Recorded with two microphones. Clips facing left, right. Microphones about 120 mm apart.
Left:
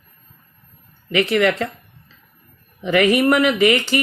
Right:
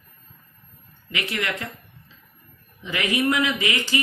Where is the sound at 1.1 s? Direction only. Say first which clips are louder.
Left 12 dB; 65° left (ahead or behind).